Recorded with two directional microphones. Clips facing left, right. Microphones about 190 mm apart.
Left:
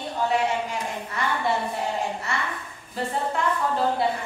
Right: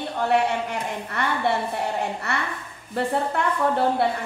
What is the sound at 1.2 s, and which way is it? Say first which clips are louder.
A woman's voice: right 2 dB; 65° right (ahead or behind).